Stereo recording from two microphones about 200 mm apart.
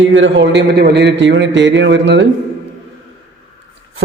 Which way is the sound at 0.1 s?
70° right (ahead or behind).